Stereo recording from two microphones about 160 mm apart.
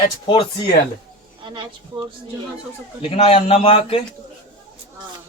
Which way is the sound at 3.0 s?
35° left (ahead or behind).